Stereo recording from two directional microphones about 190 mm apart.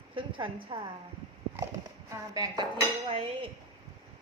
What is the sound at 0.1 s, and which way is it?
Speech, 25° right (ahead or behind).